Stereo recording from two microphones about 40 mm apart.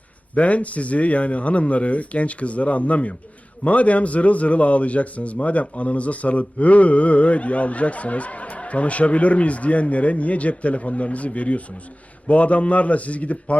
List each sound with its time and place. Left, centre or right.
0.3 s a man's voice: left